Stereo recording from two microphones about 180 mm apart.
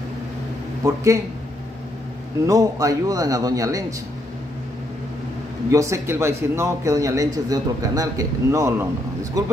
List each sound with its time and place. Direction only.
0.8 s a man's voice: 15° right (ahead or behind)
2.4 s a man's voice: 20° right (ahead or behind)
5.7 s a man's voice: 15° right (ahead or behind)